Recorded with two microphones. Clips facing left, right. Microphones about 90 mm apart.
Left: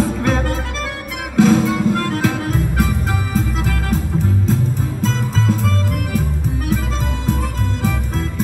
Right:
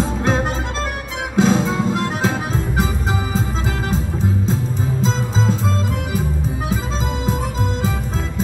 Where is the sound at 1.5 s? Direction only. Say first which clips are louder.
Left 3 dB; 20° right (ahead or behind).